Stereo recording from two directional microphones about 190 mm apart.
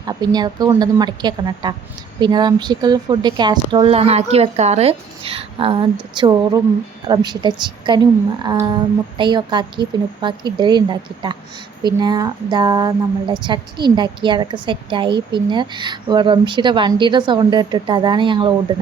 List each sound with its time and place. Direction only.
0.0 s a woman's voice: 20° right (ahead or behind)